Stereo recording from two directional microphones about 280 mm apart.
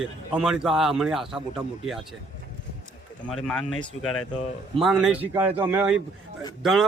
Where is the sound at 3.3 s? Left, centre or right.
Centre.